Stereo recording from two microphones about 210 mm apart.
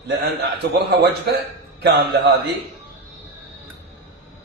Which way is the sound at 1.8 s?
50° right (ahead or behind).